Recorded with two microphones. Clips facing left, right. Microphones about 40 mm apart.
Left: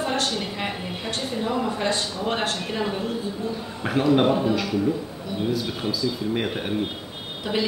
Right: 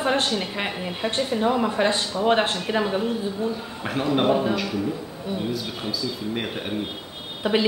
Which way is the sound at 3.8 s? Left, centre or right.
Centre.